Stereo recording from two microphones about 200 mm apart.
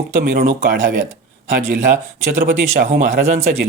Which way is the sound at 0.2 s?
45° right (ahead or behind).